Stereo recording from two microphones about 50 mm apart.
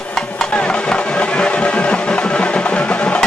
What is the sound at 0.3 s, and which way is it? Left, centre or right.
Music, centre.